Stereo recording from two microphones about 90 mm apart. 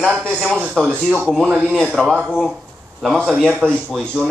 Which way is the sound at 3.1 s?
Centre (ahead or behind).